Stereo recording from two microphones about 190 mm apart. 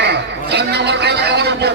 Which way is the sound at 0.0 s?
60° right (ahead or behind).